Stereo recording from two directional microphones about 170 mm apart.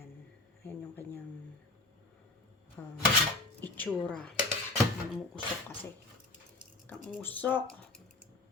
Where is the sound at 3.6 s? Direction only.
10° left (ahead or behind).